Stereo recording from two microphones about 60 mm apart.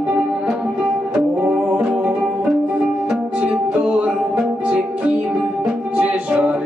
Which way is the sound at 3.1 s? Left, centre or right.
Centre.